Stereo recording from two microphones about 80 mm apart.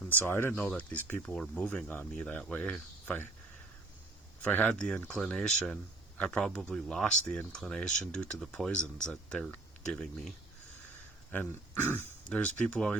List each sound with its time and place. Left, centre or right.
0.1 s speech: left
0.8 s speech: centre
4.4 s speech: centre
11.3 s speech: left
12.2 s speech: centre